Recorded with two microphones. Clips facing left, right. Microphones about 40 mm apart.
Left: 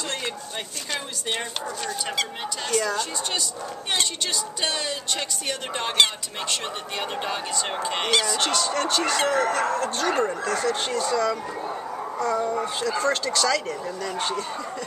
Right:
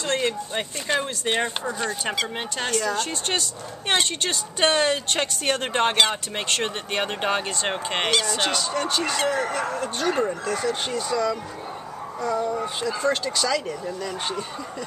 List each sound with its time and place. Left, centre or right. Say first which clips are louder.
0.2 s speech: right 6 dB; right
3.0 s speech: right 2 dB; right
8.4 s speech: left 1 dB; centre
12.4 s speech: even; left
12.8 s speech: right 1 dB; centre